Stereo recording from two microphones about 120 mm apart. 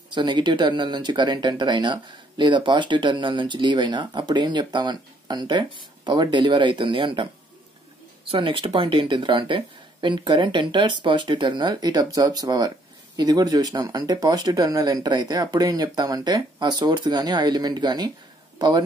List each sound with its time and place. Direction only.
0.1 s speech: 40° right (ahead or behind)
8.3 s speech: 45° right (ahead or behind)